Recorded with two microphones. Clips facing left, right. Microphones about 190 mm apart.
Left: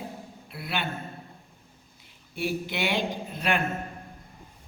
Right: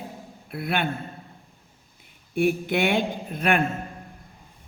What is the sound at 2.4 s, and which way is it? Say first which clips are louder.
Speech: right 7 dB; 55° right (ahead or behind).